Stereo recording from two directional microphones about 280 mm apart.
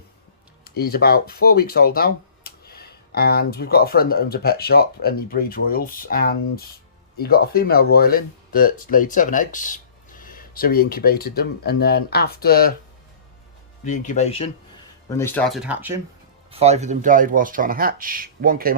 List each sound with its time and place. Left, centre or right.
0.6 s speech: left
13.8 s speech: left
15.1 s speech: centre
16.5 s speech: right